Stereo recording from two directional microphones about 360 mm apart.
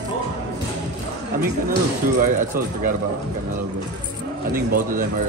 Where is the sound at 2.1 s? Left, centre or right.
Right.